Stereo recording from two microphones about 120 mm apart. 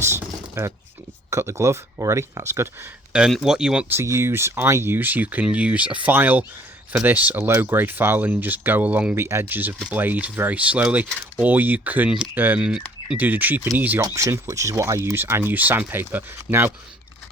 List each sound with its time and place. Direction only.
0.0 s a sound: 20° right (ahead or behind)
1.3 s speech: 25° right (ahead or behind)
3.1 s speech: 5° right (ahead or behind)
3.8 s speech: 20° right (ahead or behind)